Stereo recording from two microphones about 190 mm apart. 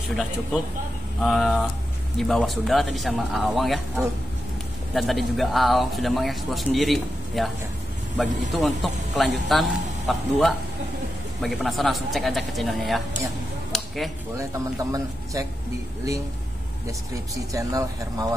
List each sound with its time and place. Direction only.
1.2 s speech: centre (ahead or behind)
13.7 s a sound: centre (ahead or behind)
14.3 s speech: 15° right (ahead or behind)
17.5 s speech: 20° right (ahead or behind)